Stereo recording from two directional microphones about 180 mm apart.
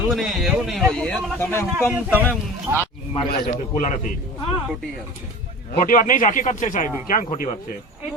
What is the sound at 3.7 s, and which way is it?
Speech, 45° left (ahead or behind).